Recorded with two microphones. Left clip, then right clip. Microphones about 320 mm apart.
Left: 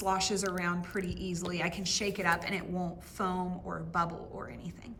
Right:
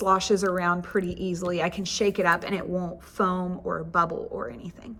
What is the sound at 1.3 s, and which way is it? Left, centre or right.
A woman's voice, centre.